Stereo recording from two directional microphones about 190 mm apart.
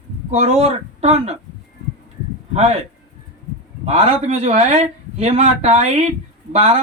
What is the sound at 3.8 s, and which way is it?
Speech, 35° right (ahead or behind).